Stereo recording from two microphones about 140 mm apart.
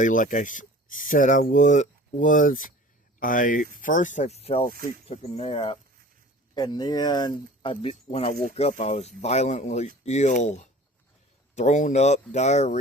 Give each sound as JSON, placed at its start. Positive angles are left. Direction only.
{"t": 0.0, "sound": "speech", "side_deg": 70}
{"t": 6.5, "sound": "speech", "side_deg": 30}